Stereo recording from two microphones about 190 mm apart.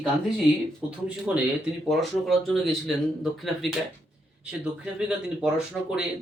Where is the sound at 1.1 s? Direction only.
5° right (ahead or behind).